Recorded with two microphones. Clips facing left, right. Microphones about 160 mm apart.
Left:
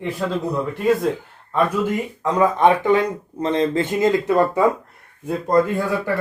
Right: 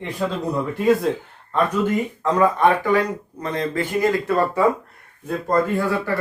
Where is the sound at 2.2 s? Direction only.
15° left (ahead or behind).